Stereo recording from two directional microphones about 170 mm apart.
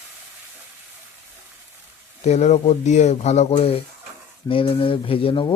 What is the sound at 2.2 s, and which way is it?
Speech, 40° left (ahead or behind).